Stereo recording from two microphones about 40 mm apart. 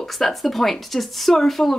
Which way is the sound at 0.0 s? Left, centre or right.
Centre.